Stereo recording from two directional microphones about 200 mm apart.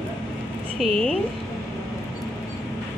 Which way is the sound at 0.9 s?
5° left (ahead or behind).